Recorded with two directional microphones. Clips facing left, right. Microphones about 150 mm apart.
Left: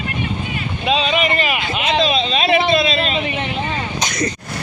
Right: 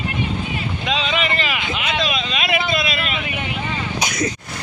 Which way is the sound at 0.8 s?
20° left (ahead or behind).